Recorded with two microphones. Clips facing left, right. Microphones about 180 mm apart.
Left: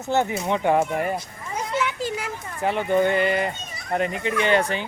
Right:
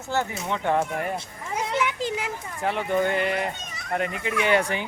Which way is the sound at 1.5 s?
15° right (ahead or behind).